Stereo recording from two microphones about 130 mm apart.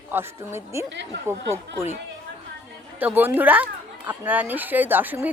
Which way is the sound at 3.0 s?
15° right (ahead or behind).